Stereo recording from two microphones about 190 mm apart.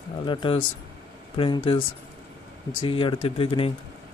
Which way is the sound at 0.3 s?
25° left (ahead or behind).